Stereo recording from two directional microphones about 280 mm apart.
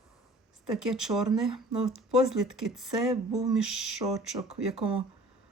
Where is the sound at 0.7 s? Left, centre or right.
Centre.